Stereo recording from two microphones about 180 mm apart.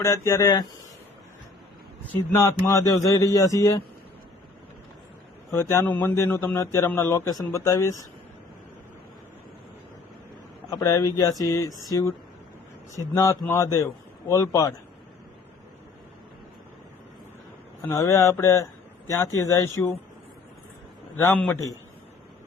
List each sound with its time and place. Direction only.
0.0 s speech: 15° left (ahead or behind)
2.3 s speech: 15° left (ahead or behind)
5.5 s speech: 15° left (ahead or behind)
10.7 s speech: 20° left (ahead or behind)
13.1 s speech: 15° left (ahead or behind)
17.8 s speech: 15° left (ahead or behind)
21.2 s speech: 10° left (ahead or behind)